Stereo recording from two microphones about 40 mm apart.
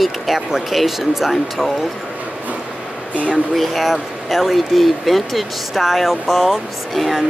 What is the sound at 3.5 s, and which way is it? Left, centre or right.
Speech, centre.